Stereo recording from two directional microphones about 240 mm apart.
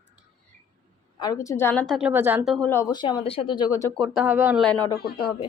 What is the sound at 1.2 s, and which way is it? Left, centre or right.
A woman's voice, centre.